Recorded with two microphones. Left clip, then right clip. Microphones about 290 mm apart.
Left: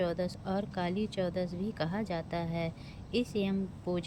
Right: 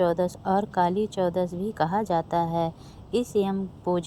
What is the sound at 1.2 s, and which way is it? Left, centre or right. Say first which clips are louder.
A woman's voice: right 8 dB; right.